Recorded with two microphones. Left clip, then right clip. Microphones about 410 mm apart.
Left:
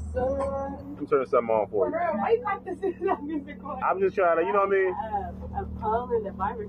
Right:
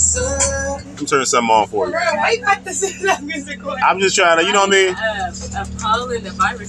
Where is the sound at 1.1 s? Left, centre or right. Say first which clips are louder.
Right 9 dB; left.